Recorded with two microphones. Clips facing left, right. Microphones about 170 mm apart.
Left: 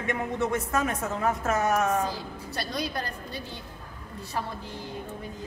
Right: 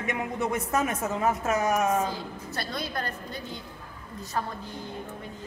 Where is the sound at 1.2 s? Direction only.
20° right (ahead or behind).